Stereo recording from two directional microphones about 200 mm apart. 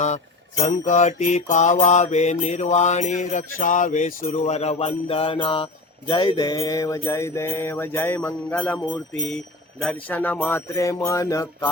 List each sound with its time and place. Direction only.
0.6 s mantra: 35° left (ahead or behind)
4.4 s music: 35° left (ahead or behind); by 11.7 s 15° left (ahead or behind)